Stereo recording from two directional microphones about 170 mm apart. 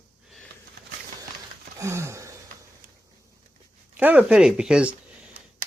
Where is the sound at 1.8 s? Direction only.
15° right (ahead or behind).